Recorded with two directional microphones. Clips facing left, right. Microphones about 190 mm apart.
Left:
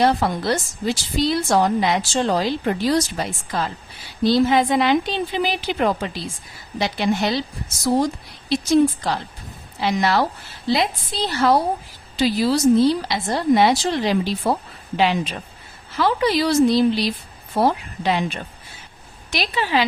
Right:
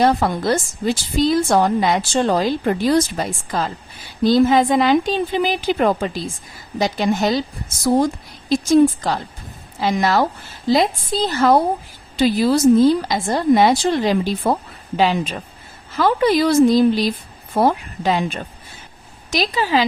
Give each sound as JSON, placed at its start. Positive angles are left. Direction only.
{"t": 0.0, "sound": "a woman's voice", "side_deg": -50}
{"t": 19.3, "sound": "a woman's voice", "side_deg": -40}